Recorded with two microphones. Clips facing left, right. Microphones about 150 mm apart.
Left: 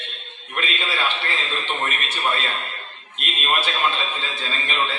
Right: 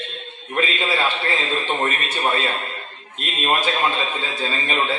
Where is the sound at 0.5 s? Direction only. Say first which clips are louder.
Right 5 dB; 35° right (ahead or behind).